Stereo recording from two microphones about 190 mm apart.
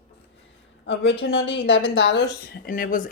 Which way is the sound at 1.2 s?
70° left (ahead or behind).